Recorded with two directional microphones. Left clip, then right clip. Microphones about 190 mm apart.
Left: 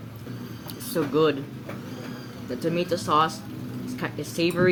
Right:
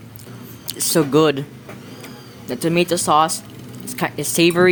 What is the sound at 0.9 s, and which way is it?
Speech, 60° right (ahead or behind).